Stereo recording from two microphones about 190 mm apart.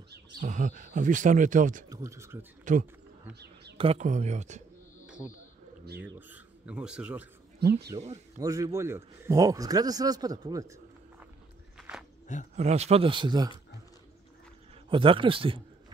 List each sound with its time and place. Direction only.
0.4 s speech: 45° right (ahead or behind)
1.9 s speech: 15° right (ahead or behind)
2.6 s speech: 40° right (ahead or behind)
3.7 s speech: 30° right (ahead or behind)
5.0 s a sound: 5° right (ahead or behind)
5.9 s speech: 55° right (ahead or behind)
6.1 s speech: 10° right (ahead or behind)
7.9 s a man's voice: 15° right (ahead or behind)
12.5 s a man's voice: 35° right (ahead or behind)
14.9 s a man's voice: 25° right (ahead or behind)